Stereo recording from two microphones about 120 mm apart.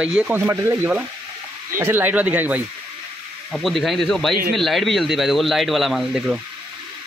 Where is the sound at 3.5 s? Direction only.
Centre (ahead or behind).